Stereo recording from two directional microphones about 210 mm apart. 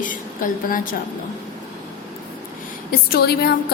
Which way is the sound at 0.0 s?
40° left (ahead or behind).